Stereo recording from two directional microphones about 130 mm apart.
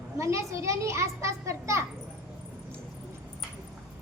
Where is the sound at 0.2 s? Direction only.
25° right (ahead or behind).